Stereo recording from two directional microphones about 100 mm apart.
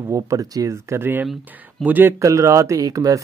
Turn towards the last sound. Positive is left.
turn(degrees=-35)  # may be behind; listen again after turning